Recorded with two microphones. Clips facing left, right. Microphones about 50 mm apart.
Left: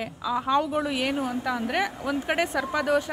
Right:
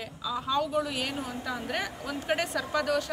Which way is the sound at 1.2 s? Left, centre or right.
Left.